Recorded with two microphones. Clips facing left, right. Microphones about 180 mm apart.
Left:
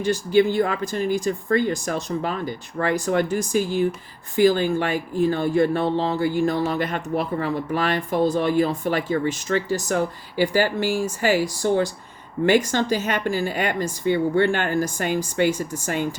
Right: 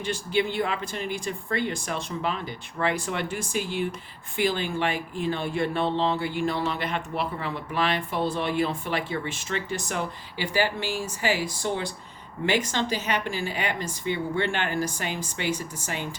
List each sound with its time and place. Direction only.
0.0 s speech: 40° left (ahead or behind)